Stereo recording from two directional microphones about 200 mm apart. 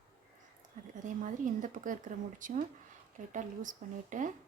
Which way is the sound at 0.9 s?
40° right (ahead or behind).